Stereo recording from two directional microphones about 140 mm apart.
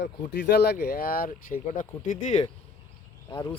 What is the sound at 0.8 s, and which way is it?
Speech, 90° left.